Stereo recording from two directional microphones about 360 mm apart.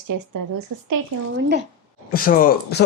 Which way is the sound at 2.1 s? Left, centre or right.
Left.